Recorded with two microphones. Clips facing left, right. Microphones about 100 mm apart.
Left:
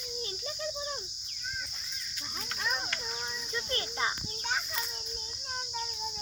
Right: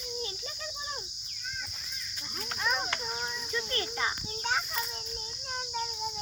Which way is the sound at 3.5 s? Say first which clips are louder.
Right 1 dB; 20° left (ahead or behind).